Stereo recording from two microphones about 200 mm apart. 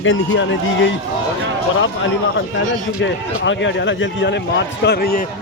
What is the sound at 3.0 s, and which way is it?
A man's voice, 65° left (ahead or behind).